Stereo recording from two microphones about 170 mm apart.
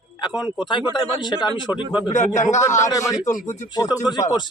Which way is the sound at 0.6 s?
30° left (ahead or behind).